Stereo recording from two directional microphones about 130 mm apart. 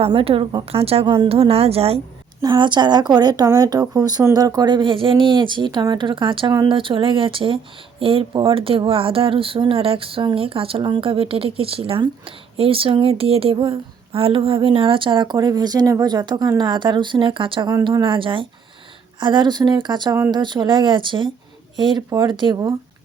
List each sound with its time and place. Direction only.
0.0 s a woman's voice: 45° right (ahead or behind)
2.4 s speech: 35° right (ahead or behind)